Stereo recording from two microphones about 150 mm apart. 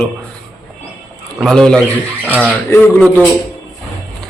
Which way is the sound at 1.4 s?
5° left (ahead or behind).